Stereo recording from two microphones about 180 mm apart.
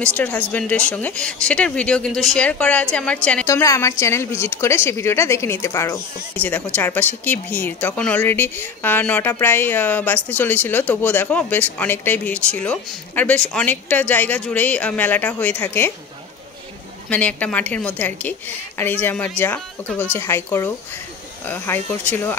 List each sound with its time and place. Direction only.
0.0 s speech: 10° left (ahead or behind)
3.4 s a woman's voice: 15° left (ahead or behind)
17.1 s a woman's voice: 10° left (ahead or behind)